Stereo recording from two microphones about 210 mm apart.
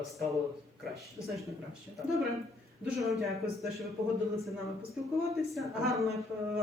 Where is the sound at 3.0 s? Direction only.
Centre (ahead or behind).